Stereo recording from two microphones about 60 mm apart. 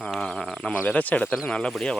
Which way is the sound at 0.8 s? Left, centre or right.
Left.